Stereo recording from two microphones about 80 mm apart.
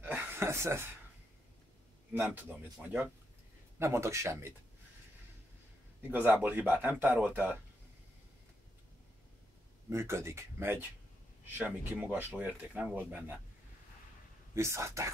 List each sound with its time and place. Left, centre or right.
0.0 s a sound: right
2.1 s speech: right
3.8 s speech: right
6.0 s speech: right
9.8 s speech: right
14.5 s speech: right